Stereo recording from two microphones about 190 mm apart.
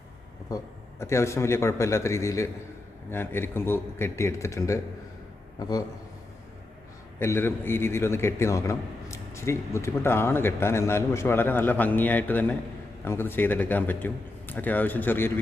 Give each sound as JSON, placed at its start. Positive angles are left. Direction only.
{"t": 0.5, "sound": "a man's voice", "side_deg": 15}
{"t": 7.2, "sound": "a man's voice", "side_deg": 10}